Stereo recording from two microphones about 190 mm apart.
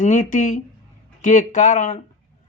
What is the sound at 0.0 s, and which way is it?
Speech, 40° left (ahead or behind).